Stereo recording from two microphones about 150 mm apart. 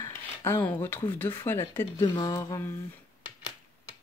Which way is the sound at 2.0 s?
30° left (ahead or behind).